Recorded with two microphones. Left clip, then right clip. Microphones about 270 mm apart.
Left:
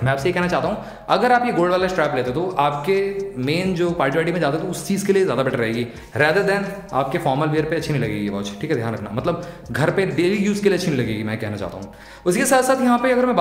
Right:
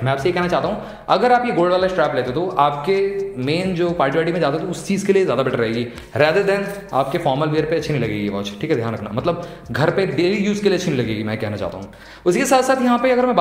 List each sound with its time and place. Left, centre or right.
0.0 s a man's voice: centre